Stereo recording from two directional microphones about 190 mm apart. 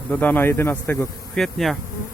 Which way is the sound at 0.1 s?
10° left (ahead or behind).